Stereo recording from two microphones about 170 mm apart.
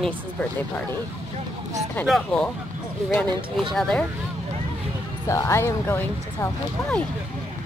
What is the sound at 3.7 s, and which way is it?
Speech, 5° left (ahead or behind).